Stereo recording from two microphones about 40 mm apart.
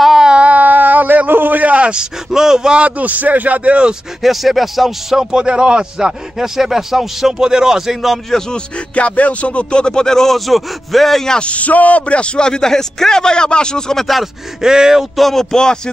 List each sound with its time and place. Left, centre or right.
0.4 s a sound: right
1.9 s speech: centre
2.7 s a man's voice: right
4.2 s speech: centre
8.3 s speech: centre
11.2 s speech: left
14.0 s speech: centre
14.6 s speech: centre
15.1 s speech: centre
15.5 s speech: centre